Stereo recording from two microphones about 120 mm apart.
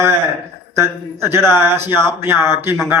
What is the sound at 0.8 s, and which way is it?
A man's voice, 20° right (ahead or behind).